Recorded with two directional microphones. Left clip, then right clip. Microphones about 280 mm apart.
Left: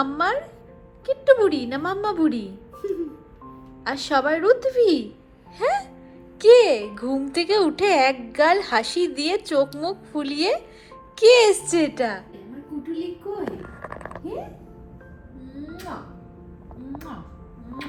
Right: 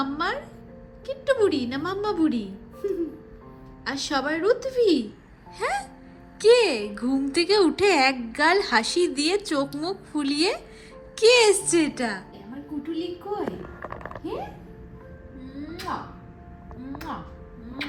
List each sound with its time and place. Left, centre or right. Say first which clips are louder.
0.0 s speech: left 5 dB; centre
5.5 s music: left 5 dB; centre
6.4 s a woman's voice: left 5 dB; centre
13.4 s a sound: even; right
15.7 s music: right 5 dB; centre